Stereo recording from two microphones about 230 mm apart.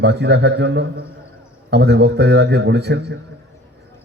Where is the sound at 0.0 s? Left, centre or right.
Right.